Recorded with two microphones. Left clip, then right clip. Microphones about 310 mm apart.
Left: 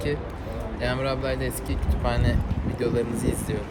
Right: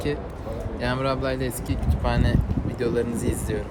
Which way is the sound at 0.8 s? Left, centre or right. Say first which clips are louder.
Right 1 dB; centre.